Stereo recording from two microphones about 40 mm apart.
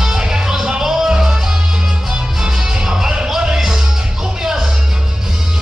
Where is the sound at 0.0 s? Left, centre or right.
Centre.